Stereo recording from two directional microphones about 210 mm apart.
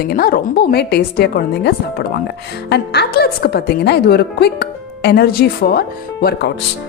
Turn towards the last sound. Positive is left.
turn(degrees=50)  # may be behind; listen again after turning